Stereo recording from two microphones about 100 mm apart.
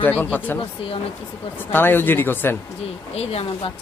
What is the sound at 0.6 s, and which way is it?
Speech, 65° left (ahead or behind).